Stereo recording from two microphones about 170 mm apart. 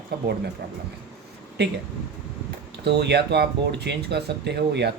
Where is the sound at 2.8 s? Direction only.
75° right (ahead or behind).